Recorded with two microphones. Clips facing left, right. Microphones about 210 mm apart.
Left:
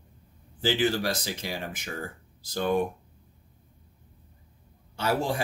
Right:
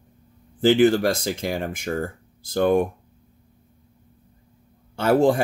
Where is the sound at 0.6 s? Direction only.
55° right (ahead or behind).